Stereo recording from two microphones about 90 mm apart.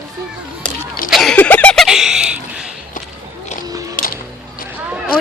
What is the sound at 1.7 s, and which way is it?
Giggle, centre (ahead or behind).